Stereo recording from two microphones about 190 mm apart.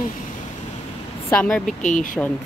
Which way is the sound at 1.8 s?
40° left (ahead or behind).